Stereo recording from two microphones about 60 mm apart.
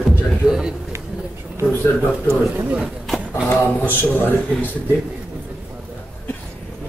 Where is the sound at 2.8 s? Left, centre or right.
Centre.